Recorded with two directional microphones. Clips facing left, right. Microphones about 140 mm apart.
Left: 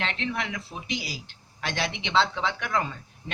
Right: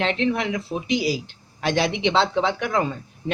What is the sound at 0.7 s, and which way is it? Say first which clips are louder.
Speech: right 11 dB; 50° right (ahead or behind).